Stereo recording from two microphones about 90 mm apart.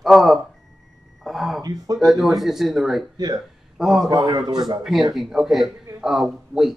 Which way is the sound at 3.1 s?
45° right (ahead or behind).